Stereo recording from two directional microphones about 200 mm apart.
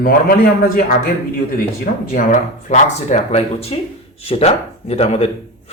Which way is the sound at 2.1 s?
40° left (ahead or behind).